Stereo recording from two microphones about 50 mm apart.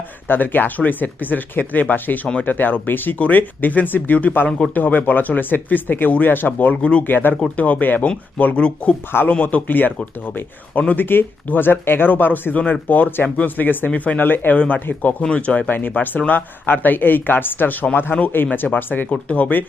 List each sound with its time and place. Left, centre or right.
0.3 s speech: left
4.4 s speech: centre
4.7 s speech: left
8.5 s speech: left
9.6 s speech: left
13.2 s speech: left
13.6 s speech: left
13.9 s speech: left
14.3 s speech: left
15.2 s speech: left
19.1 s speech: left